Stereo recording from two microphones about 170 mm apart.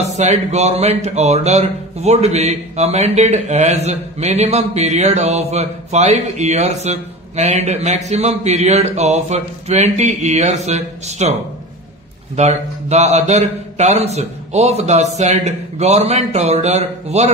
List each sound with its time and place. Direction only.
0.1 s speech: 40° right (ahead or behind)
12.4 s speech: 40° right (ahead or behind)